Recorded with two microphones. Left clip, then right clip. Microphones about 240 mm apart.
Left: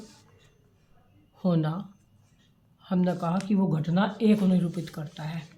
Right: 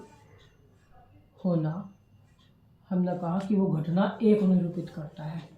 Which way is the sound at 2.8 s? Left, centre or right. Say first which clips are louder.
Left 3 dB; left.